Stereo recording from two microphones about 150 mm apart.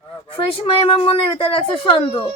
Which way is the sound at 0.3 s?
40° left (ahead or behind).